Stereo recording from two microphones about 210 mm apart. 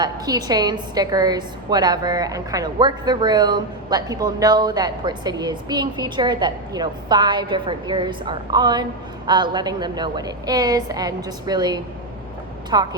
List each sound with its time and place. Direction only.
0.0 s a woman's voice: 20° right (ahead or behind)